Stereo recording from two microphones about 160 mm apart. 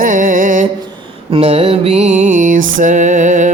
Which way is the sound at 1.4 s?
40° right (ahead or behind).